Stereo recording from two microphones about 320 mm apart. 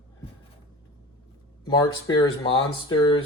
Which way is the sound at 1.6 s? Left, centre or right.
Centre.